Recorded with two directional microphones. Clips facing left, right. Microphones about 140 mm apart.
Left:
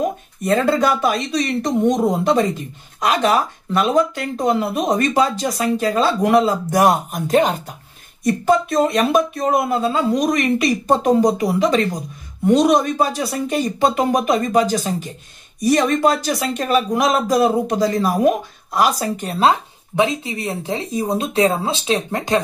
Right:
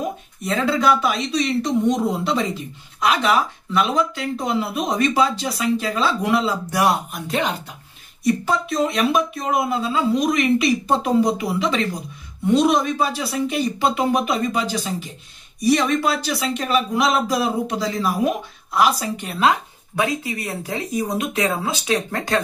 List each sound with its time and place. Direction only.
0.4 s speech: 50° left (ahead or behind); by 22.4 s 20° left (ahead or behind)